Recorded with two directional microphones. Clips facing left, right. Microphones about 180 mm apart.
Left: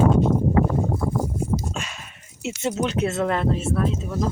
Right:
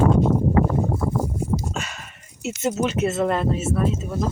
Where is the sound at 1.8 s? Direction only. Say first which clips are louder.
Right 2 dB; centre (ahead or behind).